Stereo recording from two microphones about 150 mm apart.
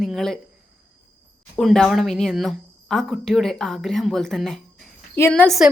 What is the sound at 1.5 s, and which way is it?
Speech, 5° left (ahead or behind).